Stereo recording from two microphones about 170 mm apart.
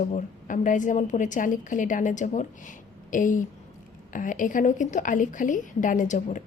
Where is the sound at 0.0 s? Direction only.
45° left (ahead or behind).